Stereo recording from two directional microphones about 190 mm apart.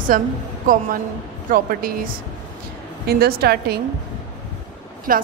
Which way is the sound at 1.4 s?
45° right (ahead or behind).